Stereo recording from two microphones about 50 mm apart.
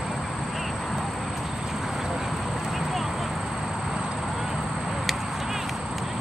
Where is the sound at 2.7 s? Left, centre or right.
Centre.